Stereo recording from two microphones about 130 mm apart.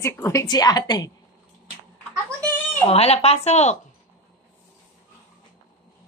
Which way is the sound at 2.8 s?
50° left (ahead or behind).